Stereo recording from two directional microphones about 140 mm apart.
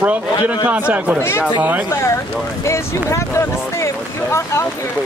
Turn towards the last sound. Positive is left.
turn(degrees=20)  # may be behind; listen again after turning